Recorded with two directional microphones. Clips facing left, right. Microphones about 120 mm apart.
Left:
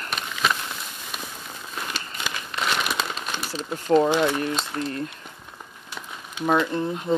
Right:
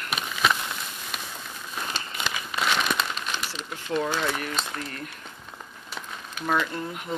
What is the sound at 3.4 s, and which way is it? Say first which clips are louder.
Speech: left 5 dB; 35° left (ahead or behind).